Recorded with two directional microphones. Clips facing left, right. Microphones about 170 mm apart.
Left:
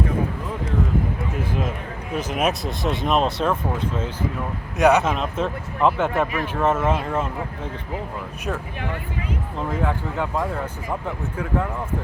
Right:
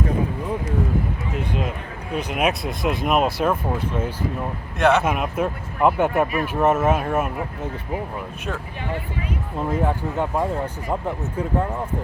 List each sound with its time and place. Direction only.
2.1 s speech: centre (ahead or behind)
4.8 s speech: centre (ahead or behind); by 8.0 s 15° right (ahead or behind)
9.6 s speech: 20° right (ahead or behind)